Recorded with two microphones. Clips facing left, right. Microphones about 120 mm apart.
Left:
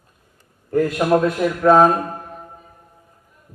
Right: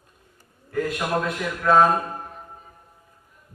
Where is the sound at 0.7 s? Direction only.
35° left (ahead or behind).